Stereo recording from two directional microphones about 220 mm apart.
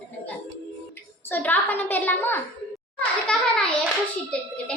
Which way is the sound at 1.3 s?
10° left (ahead or behind).